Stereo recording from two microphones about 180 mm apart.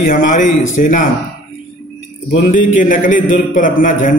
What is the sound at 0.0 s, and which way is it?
A man's voice, 50° left (ahead or behind).